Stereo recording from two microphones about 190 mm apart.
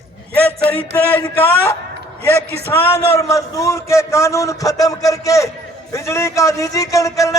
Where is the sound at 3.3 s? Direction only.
15° left (ahead or behind).